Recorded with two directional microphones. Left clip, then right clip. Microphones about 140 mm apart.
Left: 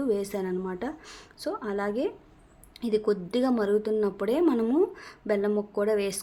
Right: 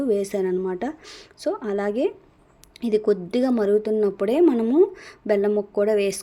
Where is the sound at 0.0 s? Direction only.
25° right (ahead or behind).